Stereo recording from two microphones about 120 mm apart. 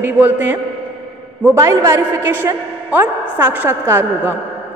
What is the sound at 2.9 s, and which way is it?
A woman's voice, 15° right (ahead or behind).